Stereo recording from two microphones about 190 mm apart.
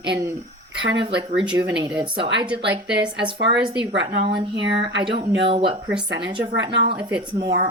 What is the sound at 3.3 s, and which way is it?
A woman's voice, 65° right (ahead or behind).